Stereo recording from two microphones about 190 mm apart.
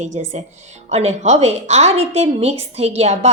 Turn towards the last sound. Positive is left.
turn(degrees=-35)  # may be behind; listen again after turning